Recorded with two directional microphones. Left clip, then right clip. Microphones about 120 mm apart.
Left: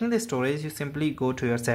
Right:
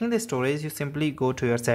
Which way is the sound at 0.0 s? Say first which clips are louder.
Right 1 dB; 15° right (ahead or behind).